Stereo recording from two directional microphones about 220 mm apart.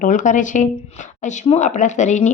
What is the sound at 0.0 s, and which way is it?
A woman's voice, 35° left (ahead or behind).